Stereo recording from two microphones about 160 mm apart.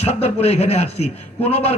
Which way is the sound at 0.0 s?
40° left (ahead or behind).